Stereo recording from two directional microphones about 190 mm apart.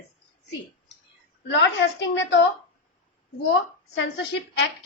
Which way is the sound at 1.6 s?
65° left (ahead or behind).